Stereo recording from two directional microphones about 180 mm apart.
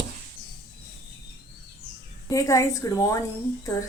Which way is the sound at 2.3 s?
20° left (ahead or behind).